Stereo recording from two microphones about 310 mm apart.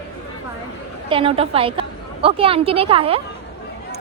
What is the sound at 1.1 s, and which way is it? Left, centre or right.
A woman's voice, centre.